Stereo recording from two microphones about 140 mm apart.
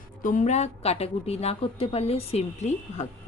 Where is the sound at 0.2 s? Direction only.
65° left (ahead or behind).